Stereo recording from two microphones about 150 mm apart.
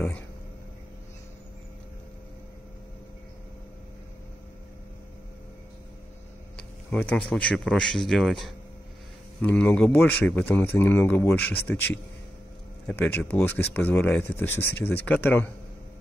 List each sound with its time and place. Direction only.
6.9 s a man's voice: 10° left (ahead or behind)